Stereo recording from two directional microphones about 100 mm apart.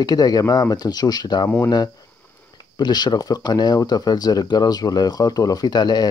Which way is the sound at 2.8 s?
45° left (ahead or behind).